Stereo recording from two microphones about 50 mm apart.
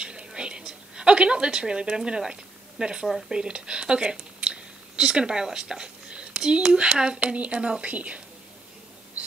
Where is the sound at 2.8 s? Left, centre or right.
Centre.